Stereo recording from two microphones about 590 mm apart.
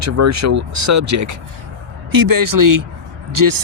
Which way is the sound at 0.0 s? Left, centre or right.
Right.